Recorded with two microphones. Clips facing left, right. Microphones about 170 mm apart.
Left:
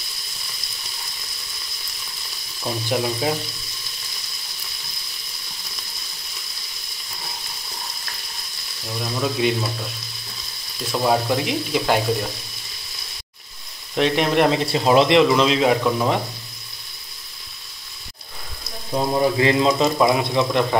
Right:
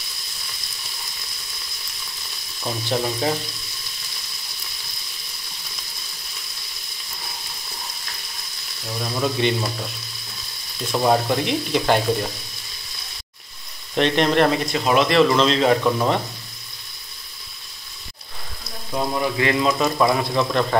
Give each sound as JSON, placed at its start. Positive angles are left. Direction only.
{"t": 2.6, "sound": "speech", "side_deg": 5}
{"t": 8.8, "sound": "frying", "side_deg": 0}
{"t": 10.9, "sound": "frying", "side_deg": 0}
{"t": 13.9, "sound": "speech", "side_deg": 5}
{"t": 14.5, "sound": "speech", "side_deg": 30}
{"t": 15.2, "sound": "speech", "side_deg": 10}
{"t": 19.1, "sound": "speech", "side_deg": 30}